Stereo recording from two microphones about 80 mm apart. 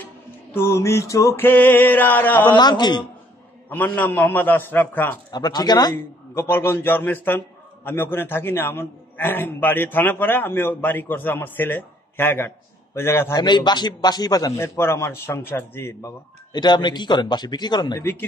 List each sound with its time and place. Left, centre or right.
0.0 s music: left
1.3 s a man's voice: left
2.5 s a man's voice: left
3.6 s a man's voice: left
5.3 s speech: left
6.3 s a man's voice: left
13.4 s speech: left
14.6 s a man's voice: left
16.5 s speech: left